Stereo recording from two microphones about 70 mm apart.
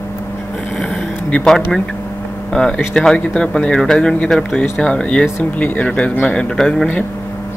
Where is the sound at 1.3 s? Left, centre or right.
Centre.